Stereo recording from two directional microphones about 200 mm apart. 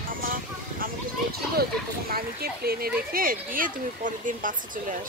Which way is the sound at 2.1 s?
50° right (ahead or behind).